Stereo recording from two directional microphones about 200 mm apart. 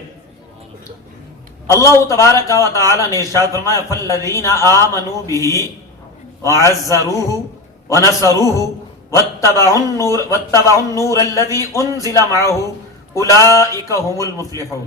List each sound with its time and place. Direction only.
1.6 s a man's voice: 15° left (ahead or behind)